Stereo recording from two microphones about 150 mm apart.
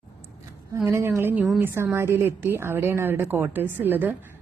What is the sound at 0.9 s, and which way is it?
A woman's voice, 15° right (ahead or behind).